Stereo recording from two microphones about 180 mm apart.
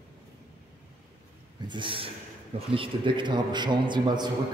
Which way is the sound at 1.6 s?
25° right (ahead or behind).